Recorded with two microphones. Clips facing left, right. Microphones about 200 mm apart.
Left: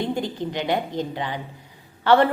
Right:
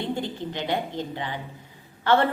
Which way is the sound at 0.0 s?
15° left (ahead or behind).